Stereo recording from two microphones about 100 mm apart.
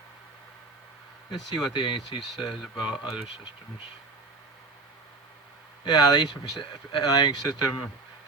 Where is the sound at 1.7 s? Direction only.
50° left (ahead or behind).